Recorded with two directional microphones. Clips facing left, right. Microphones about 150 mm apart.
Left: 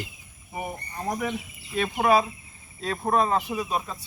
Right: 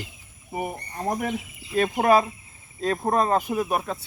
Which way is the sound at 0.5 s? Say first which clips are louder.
Right 3 dB; 45° right (ahead or behind).